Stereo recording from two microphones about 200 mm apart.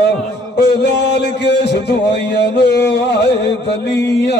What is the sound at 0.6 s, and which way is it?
Music, 60° left (ahead or behind).